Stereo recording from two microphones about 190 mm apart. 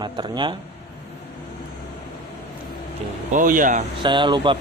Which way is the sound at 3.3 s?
45° right (ahead or behind).